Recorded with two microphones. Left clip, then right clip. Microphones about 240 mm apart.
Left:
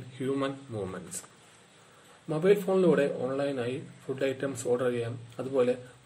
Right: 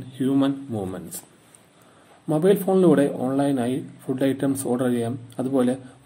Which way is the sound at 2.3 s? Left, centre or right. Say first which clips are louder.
Right 5 dB; right.